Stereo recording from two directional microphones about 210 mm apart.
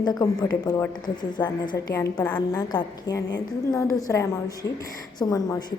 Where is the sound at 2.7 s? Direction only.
20° left (ahead or behind).